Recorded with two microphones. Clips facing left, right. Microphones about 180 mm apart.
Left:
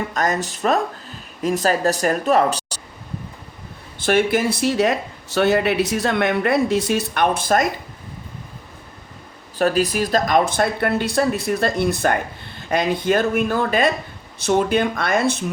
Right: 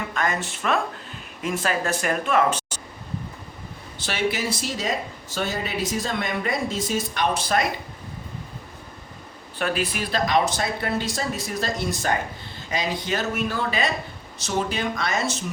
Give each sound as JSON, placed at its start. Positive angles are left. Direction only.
{"t": 0.1, "sound": "speech", "side_deg": 40}
{"t": 4.0, "sound": "speech", "side_deg": 55}
{"t": 9.6, "sound": "speech", "side_deg": 40}